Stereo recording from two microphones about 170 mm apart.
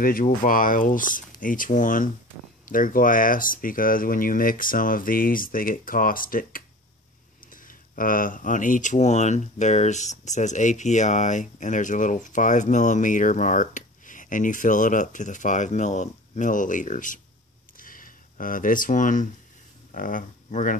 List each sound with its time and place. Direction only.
0.0 s speech: 55° left (ahead or behind)
17.7 s a sound: 55° left (ahead or behind)
19.9 s speech: 55° left (ahead or behind)